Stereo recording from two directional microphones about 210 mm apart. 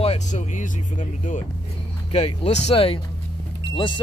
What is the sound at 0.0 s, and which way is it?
Speech, 30° left (ahead or behind).